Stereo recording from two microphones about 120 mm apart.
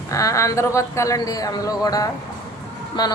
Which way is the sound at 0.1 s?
25° left (ahead or behind).